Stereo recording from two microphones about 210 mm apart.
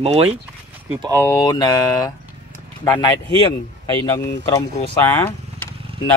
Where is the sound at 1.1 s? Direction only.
10° left (ahead or behind).